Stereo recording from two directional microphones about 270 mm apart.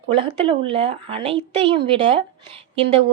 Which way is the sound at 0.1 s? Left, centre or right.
Centre.